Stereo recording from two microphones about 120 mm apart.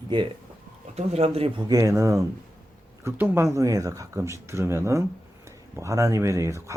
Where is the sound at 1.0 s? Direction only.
60° right (ahead or behind).